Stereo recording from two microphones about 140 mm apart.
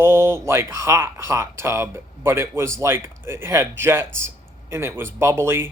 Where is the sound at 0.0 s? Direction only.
20° right (ahead or behind).